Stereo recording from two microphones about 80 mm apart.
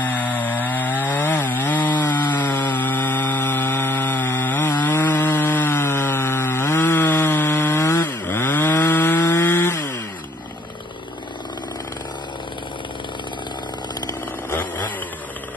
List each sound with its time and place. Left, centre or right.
0.0 s chainsaw: left